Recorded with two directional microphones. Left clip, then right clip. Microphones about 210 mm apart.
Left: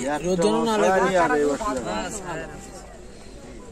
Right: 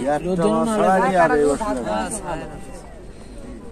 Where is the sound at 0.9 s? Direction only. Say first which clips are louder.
Right 6 dB; 50° right (ahead or behind).